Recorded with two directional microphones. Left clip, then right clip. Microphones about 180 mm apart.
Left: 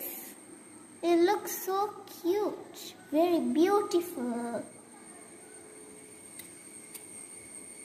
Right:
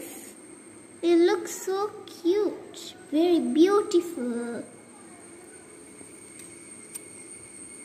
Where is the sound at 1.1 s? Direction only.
50° left (ahead or behind).